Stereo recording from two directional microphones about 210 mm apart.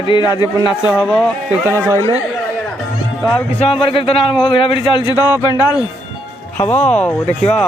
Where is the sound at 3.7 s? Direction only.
25° left (ahead or behind).